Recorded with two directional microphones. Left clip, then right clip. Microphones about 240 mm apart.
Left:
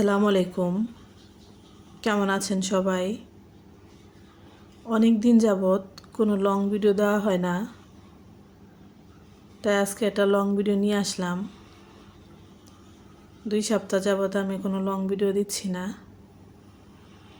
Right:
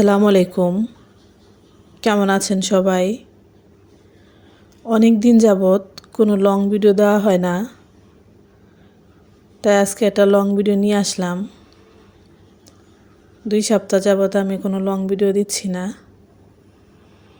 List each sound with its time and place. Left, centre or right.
0.0 s speech: right
2.0 s speech: right
4.9 s speech: right
9.6 s speech: right
13.5 s speech: right